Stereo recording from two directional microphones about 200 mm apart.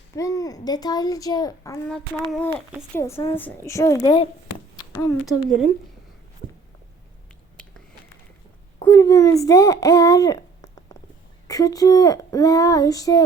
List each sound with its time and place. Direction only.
0.2 s speech: 15° left (ahead or behind)
1.9 s speech: 5° left (ahead or behind); by 4.3 s 20° left (ahead or behind)
4.8 s a sound: 20° left (ahead or behind)
8.8 s a child's voice: 15° left (ahead or behind)